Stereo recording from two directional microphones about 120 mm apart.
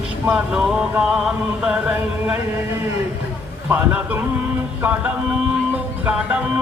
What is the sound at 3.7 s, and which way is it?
Music, 15° right (ahead or behind).